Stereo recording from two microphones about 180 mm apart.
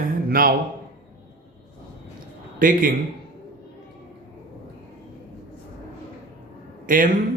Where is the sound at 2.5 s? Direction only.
50° right (ahead or behind).